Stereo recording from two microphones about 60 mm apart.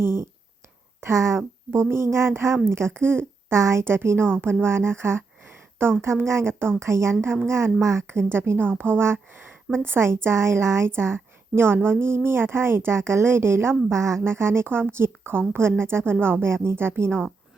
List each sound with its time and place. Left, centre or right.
0.0 s a woman's voice: right